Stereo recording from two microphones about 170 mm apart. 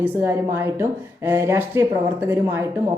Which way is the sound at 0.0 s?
15° right (ahead or behind).